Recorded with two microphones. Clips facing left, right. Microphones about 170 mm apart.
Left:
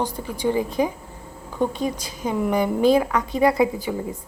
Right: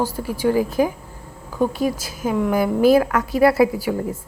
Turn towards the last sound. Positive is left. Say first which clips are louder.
# right 3 dB
turn(degrees=-5)  # may be behind; listen again after turning